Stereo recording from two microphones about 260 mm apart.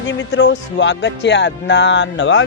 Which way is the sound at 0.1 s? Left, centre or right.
Left.